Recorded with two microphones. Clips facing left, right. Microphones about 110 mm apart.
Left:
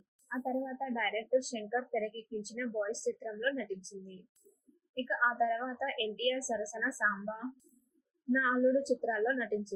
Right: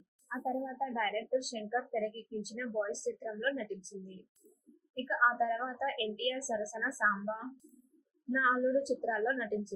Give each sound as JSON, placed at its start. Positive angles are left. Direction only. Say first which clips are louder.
{"t": 0.3, "sound": "a woman's voice", "louder": "left 1 dB", "side_deg": -15}
{"t": 1.3, "sound": "a woman's voice", "louder": "left 2 dB", "side_deg": -15}
{"t": 4.9, "sound": "a woman's voice", "louder": "right 1 dB", "side_deg": -15}
{"t": 8.3, "sound": "a woman's voice", "louder": "left 2 dB", "side_deg": -15}